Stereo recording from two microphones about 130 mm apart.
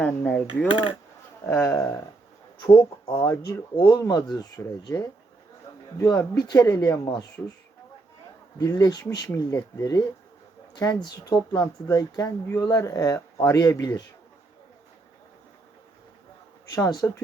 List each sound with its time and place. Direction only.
0.0 s coin: 10° left (ahead or behind)
0.7 s speech: 40° left (ahead or behind)
1.5 s speech: 20° left (ahead or behind)
8.5 s speech: 30° left (ahead or behind)
16.7 s speech: 30° left (ahead or behind)